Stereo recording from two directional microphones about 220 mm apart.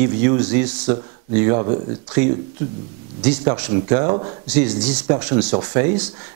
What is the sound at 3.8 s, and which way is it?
Speech, 25° right (ahead or behind).